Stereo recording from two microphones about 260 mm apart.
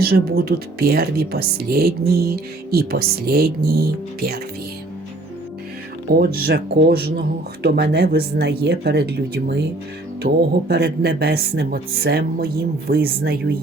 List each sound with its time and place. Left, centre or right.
0.0 s speech: right
6.1 s speech: right